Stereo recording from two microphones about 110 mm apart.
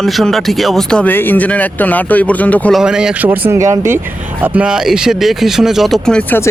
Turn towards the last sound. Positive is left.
turn(degrees=5)  # may be behind; listen again after turning